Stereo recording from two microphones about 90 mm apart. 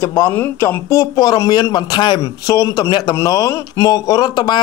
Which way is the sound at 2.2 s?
40° left (ahead or behind).